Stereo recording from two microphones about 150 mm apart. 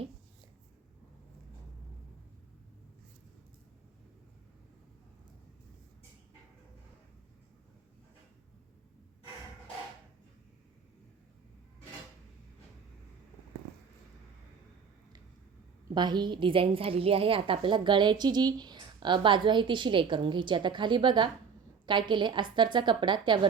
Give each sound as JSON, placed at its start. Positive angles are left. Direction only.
{"t": 16.0, "sound": "a woman's voice", "side_deg": -30}